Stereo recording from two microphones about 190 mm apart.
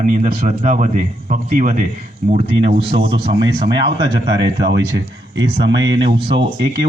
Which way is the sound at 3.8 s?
65° right (ahead or behind).